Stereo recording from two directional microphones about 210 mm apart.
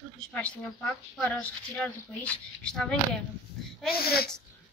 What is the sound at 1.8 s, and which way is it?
A woman's voice, 5° left (ahead or behind).